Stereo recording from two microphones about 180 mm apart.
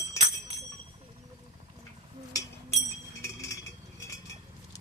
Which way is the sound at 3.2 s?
15° left (ahead or behind).